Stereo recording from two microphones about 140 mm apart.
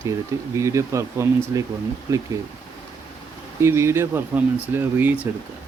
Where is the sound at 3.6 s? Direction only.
20° right (ahead or behind).